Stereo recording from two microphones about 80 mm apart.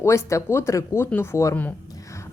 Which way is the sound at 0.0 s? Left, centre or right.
Left.